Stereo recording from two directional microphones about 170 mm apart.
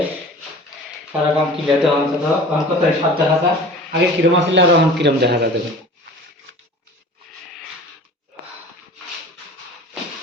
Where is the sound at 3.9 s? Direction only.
90° right; by 5.5 s 75° right (ahead or behind).